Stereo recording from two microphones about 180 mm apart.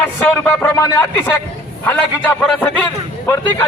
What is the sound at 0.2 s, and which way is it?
A man's voice, 10° left (ahead or behind).